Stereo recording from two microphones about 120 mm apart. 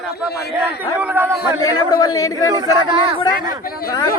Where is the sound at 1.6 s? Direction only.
35° left (ahead or behind).